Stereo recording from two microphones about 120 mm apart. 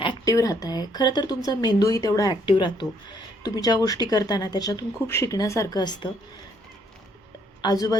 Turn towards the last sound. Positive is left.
turn(degrees=30)  # may be behind; listen again after turning